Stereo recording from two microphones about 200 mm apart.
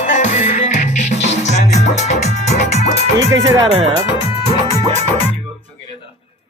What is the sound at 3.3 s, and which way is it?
Speech, 15° right (ahead or behind).